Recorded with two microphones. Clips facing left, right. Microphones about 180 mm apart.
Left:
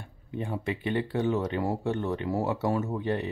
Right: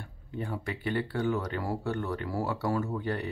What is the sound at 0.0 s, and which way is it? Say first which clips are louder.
Speech: left 2 dB; 20° left (ahead or behind).